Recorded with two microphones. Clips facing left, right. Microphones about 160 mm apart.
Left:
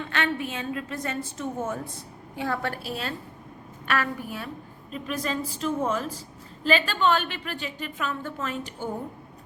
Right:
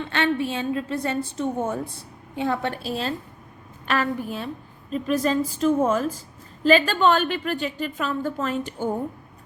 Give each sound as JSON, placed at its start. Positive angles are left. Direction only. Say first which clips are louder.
{"t": 0.1, "sound": "a woman's voice", "louder": "right 6 dB", "side_deg": -30}